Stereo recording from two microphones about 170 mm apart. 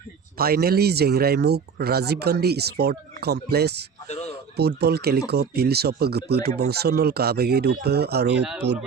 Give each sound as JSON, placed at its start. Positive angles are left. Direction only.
{"t": 0.3, "sound": "speech", "side_deg": -65}